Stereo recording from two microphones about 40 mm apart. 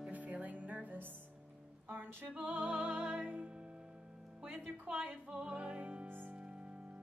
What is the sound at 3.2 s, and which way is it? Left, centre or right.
Music, right.